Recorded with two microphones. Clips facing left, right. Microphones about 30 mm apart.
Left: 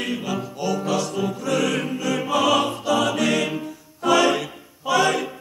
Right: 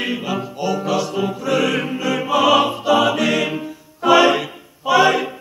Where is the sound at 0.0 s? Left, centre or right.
Centre.